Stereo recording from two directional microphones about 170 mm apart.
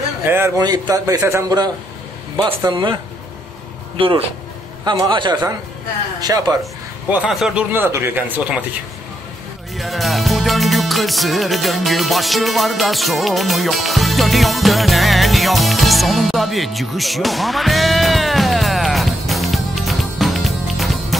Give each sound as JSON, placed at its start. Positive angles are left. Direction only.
{"t": 0.2, "sound": "a man's voice", "side_deg": -15}
{"t": 6.6, "sound": "speech", "side_deg": -5}
{"t": 9.8, "sound": "music", "side_deg": 0}